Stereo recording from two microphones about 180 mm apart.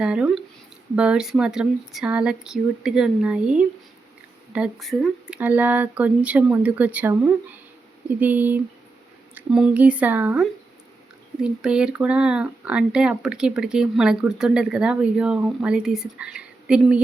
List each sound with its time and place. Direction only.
0.0 s speech: 5° right (ahead or behind)
11.4 s speech: 5° right (ahead or behind)